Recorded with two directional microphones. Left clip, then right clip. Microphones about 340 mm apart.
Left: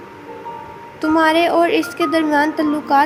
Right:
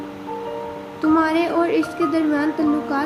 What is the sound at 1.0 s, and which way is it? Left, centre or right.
Music, left.